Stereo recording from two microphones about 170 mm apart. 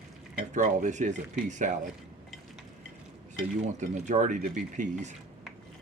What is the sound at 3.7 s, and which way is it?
Speech, 45° right (ahead or behind).